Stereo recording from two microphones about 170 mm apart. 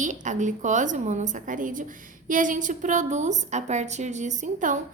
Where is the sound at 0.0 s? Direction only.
45° right (ahead or behind).